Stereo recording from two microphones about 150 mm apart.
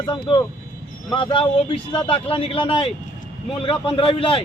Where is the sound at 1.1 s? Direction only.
35° left (ahead or behind).